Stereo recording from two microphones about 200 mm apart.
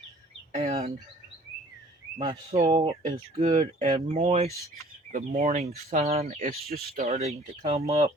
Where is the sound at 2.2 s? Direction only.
20° right (ahead or behind).